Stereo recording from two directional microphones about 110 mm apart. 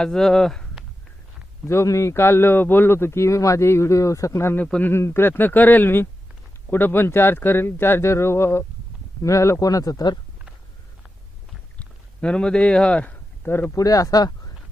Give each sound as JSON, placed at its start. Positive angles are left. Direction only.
{"t": 0.0, "sound": "speech", "side_deg": 5}
{"t": 1.6, "sound": "a man's voice", "side_deg": 25}
{"t": 11.8, "sound": "a sound", "side_deg": 10}
{"t": 13.7, "sound": "speech", "side_deg": 30}